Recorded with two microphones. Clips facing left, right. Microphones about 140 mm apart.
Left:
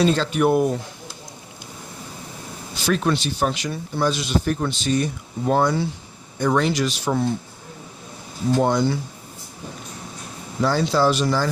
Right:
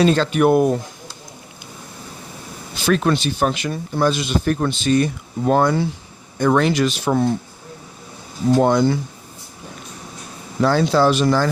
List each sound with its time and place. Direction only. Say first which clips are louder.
0.0 s speech: right 3 dB; 65° right (ahead or behind)
2.8 s speech: right 3 dB; 60° right (ahead or behind)
8.6 s speech: right 3 dB; 55° right (ahead or behind)
10.6 s speech: right 3 dB; 60° right (ahead or behind)